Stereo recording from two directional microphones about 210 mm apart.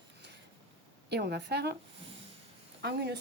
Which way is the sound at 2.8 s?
50° right (ahead or behind).